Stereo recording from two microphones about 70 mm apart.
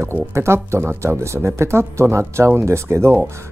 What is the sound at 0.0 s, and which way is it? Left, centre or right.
Speech, right.